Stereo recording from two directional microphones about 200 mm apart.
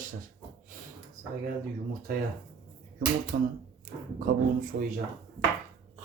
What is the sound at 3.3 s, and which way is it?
Speech, 40° right (ahead or behind).